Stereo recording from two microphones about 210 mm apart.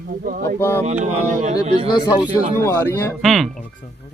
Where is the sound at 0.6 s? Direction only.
10° left (ahead or behind).